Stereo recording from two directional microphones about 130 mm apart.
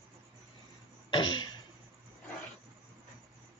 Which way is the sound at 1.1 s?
35° left (ahead or behind).